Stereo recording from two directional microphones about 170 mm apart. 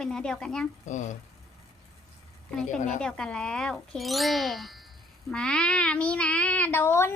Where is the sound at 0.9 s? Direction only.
45° left (ahead or behind).